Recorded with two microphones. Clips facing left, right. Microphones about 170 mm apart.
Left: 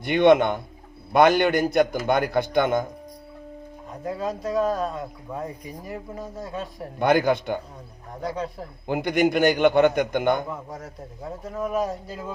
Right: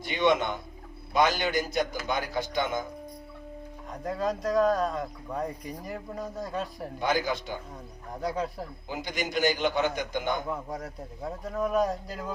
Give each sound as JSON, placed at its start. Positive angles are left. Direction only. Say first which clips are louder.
{"t": 0.0, "sound": "a man's voice", "louder": "left 8 dB", "side_deg": 60}
{"t": 3.9, "sound": "speech", "louder": "left 1 dB", "side_deg": 0}
{"t": 7.0, "sound": "a man's voice", "louder": "left 8 dB", "side_deg": 60}
{"t": 8.1, "sound": "speech", "louder": "left 1 dB", "side_deg": 0}
{"t": 8.9, "sound": "a man's voice", "louder": "left 12 dB", "side_deg": 60}
{"t": 10.5, "sound": "speech", "louder": "right 1 dB", "side_deg": 0}